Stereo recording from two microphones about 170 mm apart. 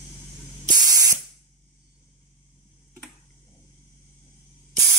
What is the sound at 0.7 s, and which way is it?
Spray, 20° right (ahead or behind).